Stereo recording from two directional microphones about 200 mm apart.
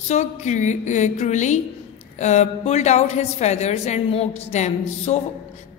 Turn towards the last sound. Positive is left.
turn(degrees=35)  # may be behind; listen again after turning